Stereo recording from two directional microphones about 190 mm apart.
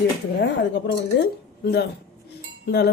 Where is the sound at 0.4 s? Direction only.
65° left (ahead or behind).